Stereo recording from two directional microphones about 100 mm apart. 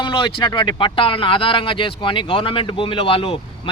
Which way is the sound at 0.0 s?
55° left (ahead or behind).